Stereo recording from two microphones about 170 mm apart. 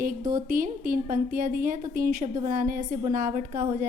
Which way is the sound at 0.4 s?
55° right (ahead or behind).